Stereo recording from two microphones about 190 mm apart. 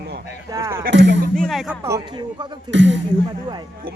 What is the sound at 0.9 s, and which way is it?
Speech, 65° right (ahead or behind).